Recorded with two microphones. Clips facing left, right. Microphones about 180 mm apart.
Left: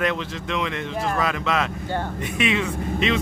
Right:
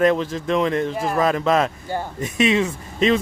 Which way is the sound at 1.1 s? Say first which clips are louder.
Right 8 dB; 45° right (ahead or behind).